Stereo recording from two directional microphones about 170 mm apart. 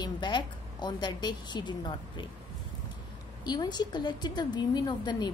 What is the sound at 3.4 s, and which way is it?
A woman's voice, 25° left (ahead or behind).